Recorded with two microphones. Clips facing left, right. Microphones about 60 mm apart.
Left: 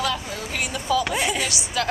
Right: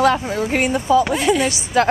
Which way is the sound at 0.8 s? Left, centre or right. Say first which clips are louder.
Right 5 dB; right.